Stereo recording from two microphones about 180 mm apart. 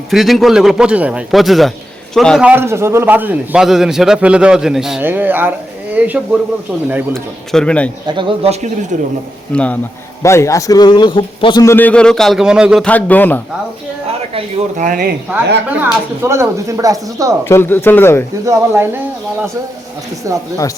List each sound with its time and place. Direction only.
0.1 s a man's voice: centre (ahead or behind)
2.5 s a man's voice: 15° right (ahead or behind)
7.1 s a man's voice: 5° left (ahead or behind)
8.0 s speech: 30° right (ahead or behind)
9.5 s a man's voice: 5° left (ahead or behind); by 11.6 s 25° left (ahead or behind)
11.6 s a man's voice: 10° left (ahead or behind); by 12.8 s 5° right (ahead or behind)
12.8 s speech: 10° left (ahead or behind)
14.3 s speech: 45° right (ahead or behind)
15.8 s a man's voice: 15° right (ahead or behind)
17.4 s speech: 10° left (ahead or behind)
18.4 s a man's voice: 15° right (ahead or behind)
20.3 s a man's voice: 15° right (ahead or behind)